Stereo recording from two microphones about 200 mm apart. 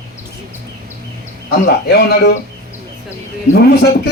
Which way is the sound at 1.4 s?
50° left (ahead or behind).